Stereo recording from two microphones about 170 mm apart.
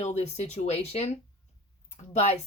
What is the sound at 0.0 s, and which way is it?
Speech, 40° left (ahead or behind).